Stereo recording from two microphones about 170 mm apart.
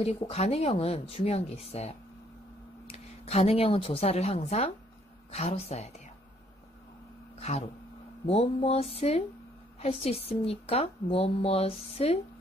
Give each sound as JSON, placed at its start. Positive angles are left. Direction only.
{"t": 0.0, "sound": "a woman's voice", "side_deg": 35}
{"t": 7.3, "sound": "a woman's voice", "side_deg": 40}